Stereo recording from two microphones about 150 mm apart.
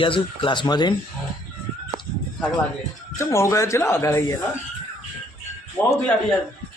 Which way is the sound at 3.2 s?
20° left (ahead or behind).